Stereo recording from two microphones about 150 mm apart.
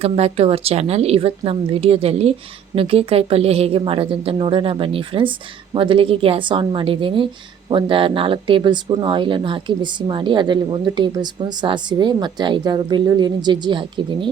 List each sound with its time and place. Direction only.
0.0 s speech: 45° right (ahead or behind)